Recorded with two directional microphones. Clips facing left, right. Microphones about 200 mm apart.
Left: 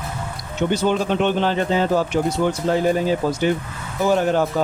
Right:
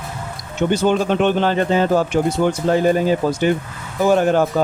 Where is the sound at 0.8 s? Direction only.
50° right (ahead or behind).